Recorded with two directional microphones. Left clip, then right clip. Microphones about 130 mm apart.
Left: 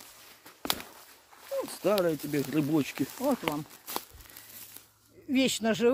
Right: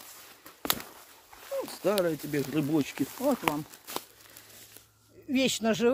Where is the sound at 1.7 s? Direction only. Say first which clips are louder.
Left 1 dB; 25° left (ahead or behind).